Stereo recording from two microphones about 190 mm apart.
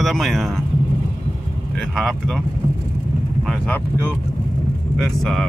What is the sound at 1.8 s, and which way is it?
Speech, centre (ahead or behind).